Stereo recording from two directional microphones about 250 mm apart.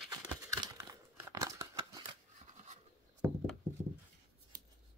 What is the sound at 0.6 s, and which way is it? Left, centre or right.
Crumpling, centre.